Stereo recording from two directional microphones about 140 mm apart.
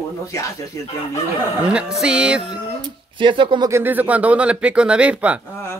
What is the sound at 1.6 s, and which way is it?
Speech, 5° right (ahead or behind).